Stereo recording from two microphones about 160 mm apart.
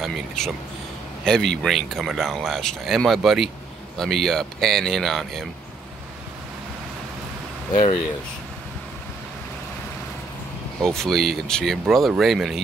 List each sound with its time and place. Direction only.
0.4 s speech: 5° left (ahead or behind)
7.7 s speech: 35° left (ahead or behind)
10.8 s speech: 5° left (ahead or behind)